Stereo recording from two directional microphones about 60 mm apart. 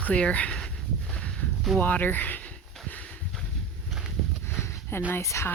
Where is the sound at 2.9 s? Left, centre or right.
Left.